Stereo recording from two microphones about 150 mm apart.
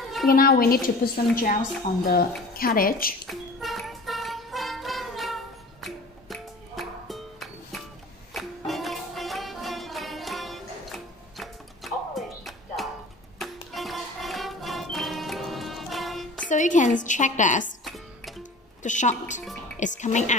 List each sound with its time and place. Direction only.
0.4 s a woman's voice: 80° left
3.3 s music: centre (ahead or behind)
16.4 s a sound: 55° left (ahead or behind)
17.8 s music: centre (ahead or behind)
18.8 s a woman's voice: 55° left (ahead or behind)